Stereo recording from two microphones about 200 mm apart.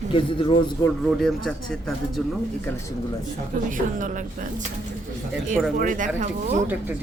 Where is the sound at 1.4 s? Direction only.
Centre (ahead or behind).